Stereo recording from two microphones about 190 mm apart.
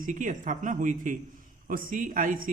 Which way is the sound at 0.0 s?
40° right (ahead or behind).